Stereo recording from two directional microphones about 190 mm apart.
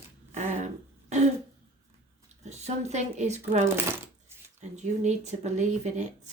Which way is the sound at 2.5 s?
35° right (ahead or behind).